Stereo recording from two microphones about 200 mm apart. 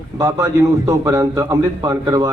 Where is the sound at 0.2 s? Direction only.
15° right (ahead or behind).